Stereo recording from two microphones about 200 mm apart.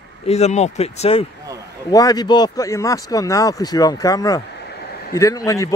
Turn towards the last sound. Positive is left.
turn(degrees=15)  # may be behind; listen again after turning